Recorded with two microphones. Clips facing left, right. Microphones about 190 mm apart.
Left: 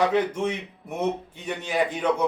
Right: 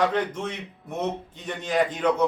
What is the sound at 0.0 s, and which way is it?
A man's voice, 10° left (ahead or behind).